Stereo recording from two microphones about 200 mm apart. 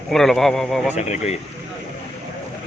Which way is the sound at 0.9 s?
35° left (ahead or behind).